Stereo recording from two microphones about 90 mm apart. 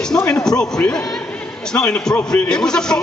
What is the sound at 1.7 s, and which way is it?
Speech, 20° left (ahead or behind).